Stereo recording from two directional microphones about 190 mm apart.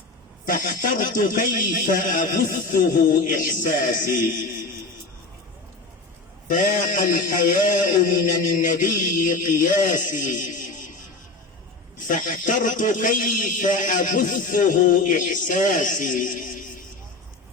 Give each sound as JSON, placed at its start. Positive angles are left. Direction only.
{"t": 0.4, "sound": "a man's voice", "side_deg": 50}
{"t": 6.5, "sound": "a man's voice", "side_deg": 45}
{"t": 12.0, "sound": "a man's voice", "side_deg": 45}